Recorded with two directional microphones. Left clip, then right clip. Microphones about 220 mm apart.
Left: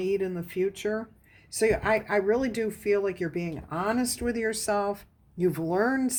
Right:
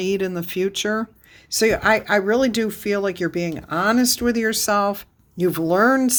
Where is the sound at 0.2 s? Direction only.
40° right (ahead or behind).